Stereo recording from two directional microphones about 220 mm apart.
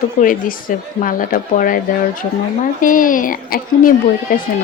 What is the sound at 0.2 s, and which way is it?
Speech, 40° left (ahead or behind).